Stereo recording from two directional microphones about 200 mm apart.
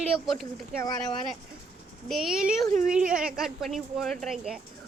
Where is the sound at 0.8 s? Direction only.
20° left (ahead or behind).